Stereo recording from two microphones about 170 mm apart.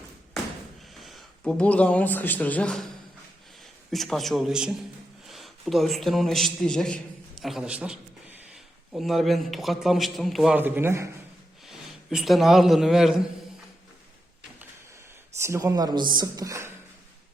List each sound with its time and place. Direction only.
0.9 s a man's voice: centre (ahead or behind)
10.6 s a man's voice: 15° right (ahead or behind)
11.6 s a man's voice: centre (ahead or behind)
15.4 s speech: 15° right (ahead or behind)